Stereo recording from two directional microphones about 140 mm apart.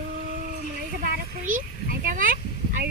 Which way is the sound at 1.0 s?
70° right (ahead or behind).